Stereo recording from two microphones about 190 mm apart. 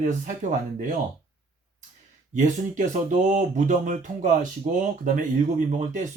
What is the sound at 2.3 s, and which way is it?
Speech, 40° right (ahead or behind).